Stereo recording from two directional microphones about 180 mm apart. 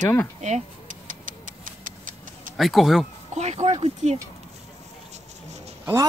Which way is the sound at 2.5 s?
Centre (ahead or behind).